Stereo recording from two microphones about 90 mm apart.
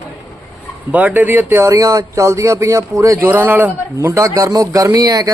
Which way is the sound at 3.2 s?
25° right (ahead or behind).